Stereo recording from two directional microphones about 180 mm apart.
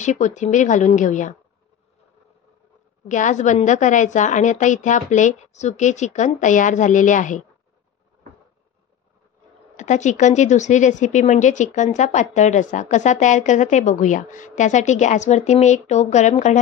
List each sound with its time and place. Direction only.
0.0 s a woman's voice: 40° left (ahead or behind)
3.1 s a woman's voice: 45° left (ahead or behind)
9.8 s speech: 40° left (ahead or behind)